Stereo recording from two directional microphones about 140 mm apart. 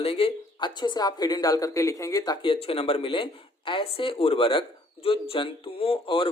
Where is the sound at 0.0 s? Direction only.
40° left (ahead or behind).